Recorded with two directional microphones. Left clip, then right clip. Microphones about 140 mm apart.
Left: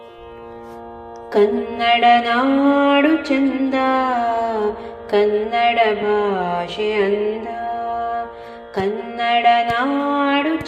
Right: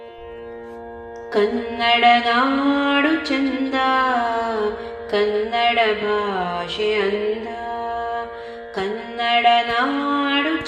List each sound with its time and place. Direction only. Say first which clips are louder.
1.3 s music: left 4 dB; 45° left (ahead or behind)